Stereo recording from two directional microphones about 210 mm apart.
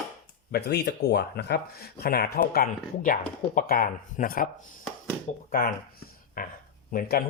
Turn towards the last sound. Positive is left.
turn(degrees=45)  # may be behind; listen again after turning